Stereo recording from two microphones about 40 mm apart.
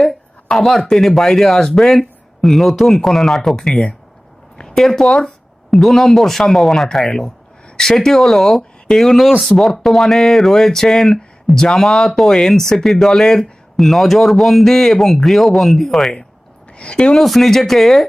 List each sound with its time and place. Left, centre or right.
0.5 s speech: centre
6.8 s speech: centre
16.7 s speech: left
17.2 s speech: centre